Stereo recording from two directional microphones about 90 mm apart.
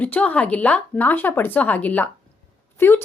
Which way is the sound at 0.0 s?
15° left (ahead or behind).